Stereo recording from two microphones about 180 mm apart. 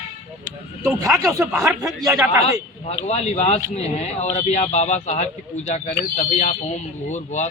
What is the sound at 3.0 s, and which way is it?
Speech, 35° left (ahead or behind).